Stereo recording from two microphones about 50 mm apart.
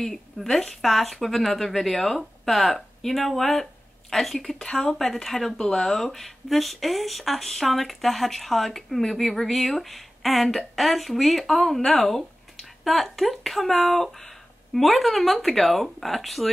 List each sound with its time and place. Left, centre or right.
0.0 s speech: centre